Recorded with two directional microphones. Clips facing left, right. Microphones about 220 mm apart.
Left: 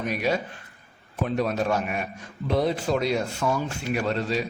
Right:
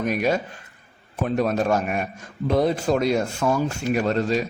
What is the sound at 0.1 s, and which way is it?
A man's voice, 45° right (ahead or behind).